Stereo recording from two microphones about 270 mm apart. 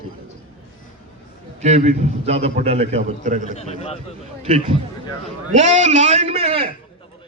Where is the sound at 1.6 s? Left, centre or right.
Right.